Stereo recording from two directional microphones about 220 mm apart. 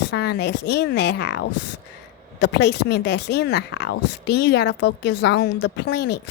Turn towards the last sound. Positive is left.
turn(degrees=50)  # may be behind; listen again after turning